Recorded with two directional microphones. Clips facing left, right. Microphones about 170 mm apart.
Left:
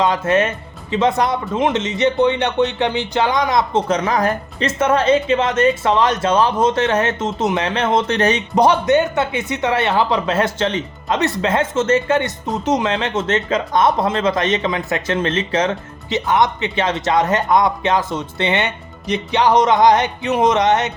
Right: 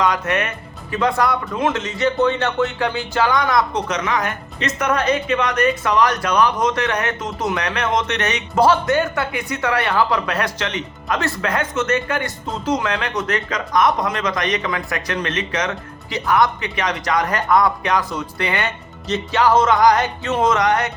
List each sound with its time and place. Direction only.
0.0 s speech: 25° left (ahead or behind)
8.5 s speech: 20° left (ahead or behind)